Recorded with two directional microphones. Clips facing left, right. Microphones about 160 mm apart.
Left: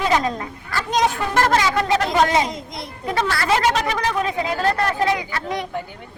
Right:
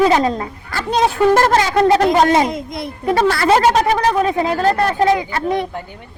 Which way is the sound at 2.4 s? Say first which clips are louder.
Right 7 dB; 55° right (ahead or behind).